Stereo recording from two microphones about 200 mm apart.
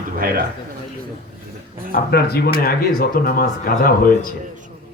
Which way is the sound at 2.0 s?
50° left (ahead or behind).